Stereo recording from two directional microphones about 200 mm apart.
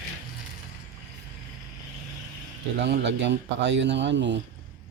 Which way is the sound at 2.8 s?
60° right (ahead or behind).